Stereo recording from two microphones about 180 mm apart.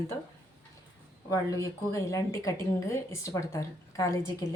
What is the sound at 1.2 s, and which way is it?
A woman's voice, 20° left (ahead or behind).